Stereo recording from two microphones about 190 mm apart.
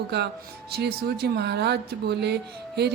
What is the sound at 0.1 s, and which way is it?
A woman's voice, 65° right (ahead or behind).